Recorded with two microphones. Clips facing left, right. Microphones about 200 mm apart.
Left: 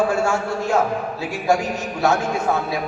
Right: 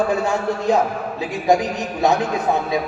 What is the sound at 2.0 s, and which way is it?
Speech, 15° right (ahead or behind).